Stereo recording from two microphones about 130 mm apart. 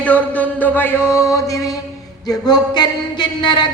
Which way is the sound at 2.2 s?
30° left (ahead or behind).